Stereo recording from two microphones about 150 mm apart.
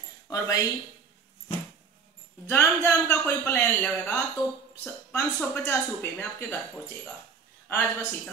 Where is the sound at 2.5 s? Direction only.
15° left (ahead or behind).